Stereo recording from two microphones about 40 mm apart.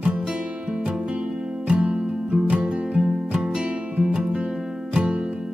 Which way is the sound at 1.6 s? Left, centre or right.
Right.